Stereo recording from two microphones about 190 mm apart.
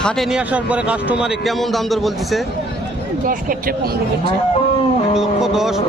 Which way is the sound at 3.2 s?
45° right (ahead or behind).